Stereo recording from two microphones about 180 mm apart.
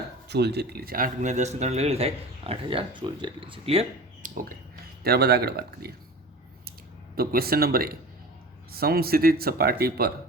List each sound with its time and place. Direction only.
0.3 s speech: 65° right (ahead or behind); by 3.8 s 30° right (ahead or behind)
4.2 s a sound: 50° right (ahead or behind)
5.0 s speech: 60° right (ahead or behind)
7.2 s speech: 55° right (ahead or behind)